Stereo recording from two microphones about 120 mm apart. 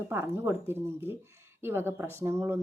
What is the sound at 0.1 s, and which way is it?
Speech, 20° right (ahead or behind).